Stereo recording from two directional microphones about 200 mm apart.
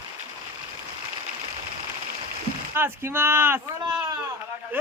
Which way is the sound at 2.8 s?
10° right (ahead or behind).